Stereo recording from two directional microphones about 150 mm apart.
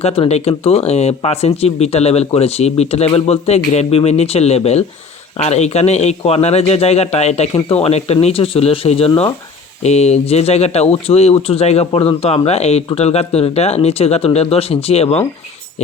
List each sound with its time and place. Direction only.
0.0 s speech: 40° left (ahead or behind)